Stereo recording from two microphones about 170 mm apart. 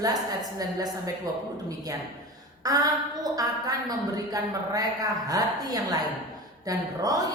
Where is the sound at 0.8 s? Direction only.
20° right (ahead or behind).